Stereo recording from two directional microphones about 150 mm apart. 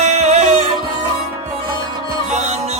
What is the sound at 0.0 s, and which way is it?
Music, 50° right (ahead or behind).